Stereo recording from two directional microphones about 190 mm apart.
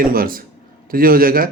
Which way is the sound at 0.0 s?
50° right (ahead or behind).